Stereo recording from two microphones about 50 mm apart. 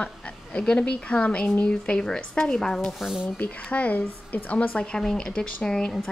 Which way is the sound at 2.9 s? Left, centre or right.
Centre.